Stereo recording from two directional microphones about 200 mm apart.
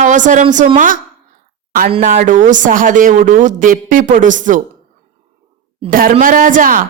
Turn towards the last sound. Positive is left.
turn(degrees=-40)  # may be behind; listen again after turning